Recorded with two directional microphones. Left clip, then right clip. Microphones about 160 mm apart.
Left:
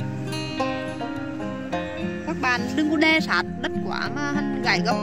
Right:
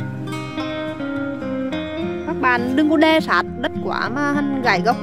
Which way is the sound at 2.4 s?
65° right (ahead or behind).